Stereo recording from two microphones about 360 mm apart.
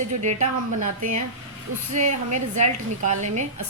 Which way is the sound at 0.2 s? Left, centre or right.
Centre.